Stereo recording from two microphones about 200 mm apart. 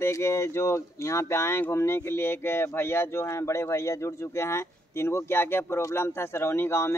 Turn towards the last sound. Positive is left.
turn(degrees=10)  # may be behind; listen again after turning